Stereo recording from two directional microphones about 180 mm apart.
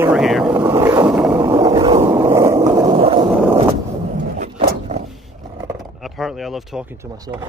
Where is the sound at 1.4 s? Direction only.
20° right (ahead or behind).